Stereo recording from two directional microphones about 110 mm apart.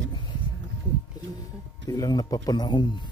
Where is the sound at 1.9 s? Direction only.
35° left (ahead or behind).